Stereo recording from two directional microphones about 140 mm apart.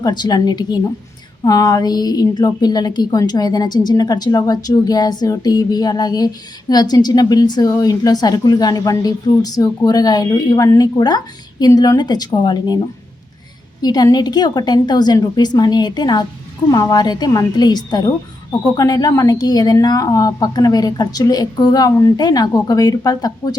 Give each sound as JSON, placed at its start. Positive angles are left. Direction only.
{"t": 0.0, "sound": "a woman's voice", "side_deg": 30}
{"t": 13.8, "sound": "a woman's voice", "side_deg": 30}